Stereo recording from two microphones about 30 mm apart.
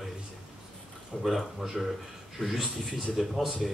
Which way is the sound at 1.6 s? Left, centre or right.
Centre.